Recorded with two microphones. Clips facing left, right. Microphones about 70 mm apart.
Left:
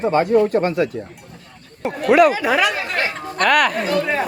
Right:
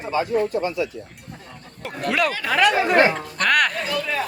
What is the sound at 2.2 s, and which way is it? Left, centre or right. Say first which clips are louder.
Speech: left 8 dB; centre.